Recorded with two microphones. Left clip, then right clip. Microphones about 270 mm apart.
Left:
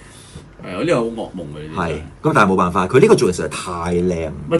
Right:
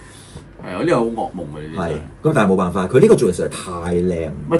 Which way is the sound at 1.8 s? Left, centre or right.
Left.